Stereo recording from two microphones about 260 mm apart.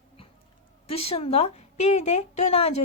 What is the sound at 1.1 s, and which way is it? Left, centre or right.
A woman's voice, left.